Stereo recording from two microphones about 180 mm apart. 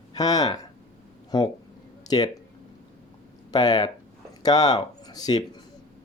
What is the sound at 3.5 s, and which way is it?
Speech, 20° left (ahead or behind).